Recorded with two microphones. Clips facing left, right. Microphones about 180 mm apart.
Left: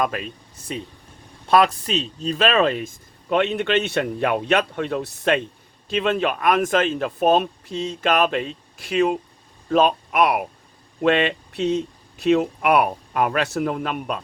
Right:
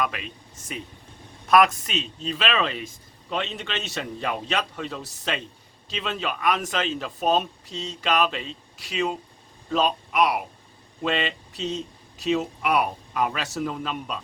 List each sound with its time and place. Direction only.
0.0 s speech: 45° left (ahead or behind)
1.5 s speech: 30° left (ahead or behind); by 14.2 s 60° left (ahead or behind)